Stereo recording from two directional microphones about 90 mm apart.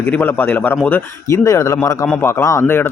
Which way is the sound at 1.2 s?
35° left (ahead or behind).